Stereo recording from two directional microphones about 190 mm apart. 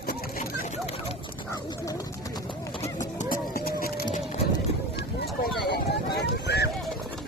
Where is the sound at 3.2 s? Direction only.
50° left (ahead or behind).